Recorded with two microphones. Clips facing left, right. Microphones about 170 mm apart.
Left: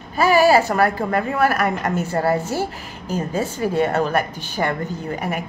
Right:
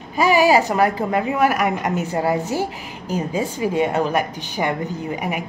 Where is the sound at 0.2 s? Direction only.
15° right (ahead or behind).